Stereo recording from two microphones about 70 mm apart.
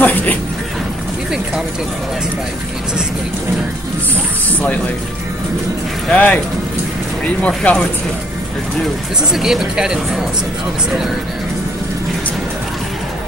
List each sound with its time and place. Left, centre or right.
0.0 s speech: left
6.0 s speech: left
7.4 s speech: centre
9.3 s speech: centre